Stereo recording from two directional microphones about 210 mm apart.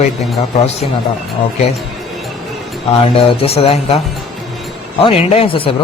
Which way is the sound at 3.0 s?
25° left (ahead or behind).